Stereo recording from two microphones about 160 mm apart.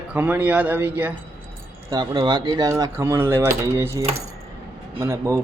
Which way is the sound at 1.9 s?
25° right (ahead or behind).